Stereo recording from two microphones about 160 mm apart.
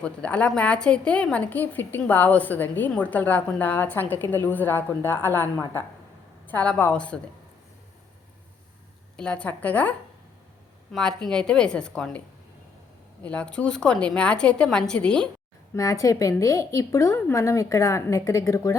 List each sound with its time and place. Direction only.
0.0 s a woman's voice: 10° left (ahead or behind)
9.1 s a woman's voice: 5° left (ahead or behind)
10.9 s a woman's voice: 5° left (ahead or behind)
13.2 s a woman's voice: 5° left (ahead or behind)
15.7 s a woman's voice: 20° left (ahead or behind)